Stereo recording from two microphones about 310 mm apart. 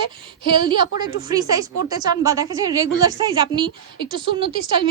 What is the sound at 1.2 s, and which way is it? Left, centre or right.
A woman's voice, centre.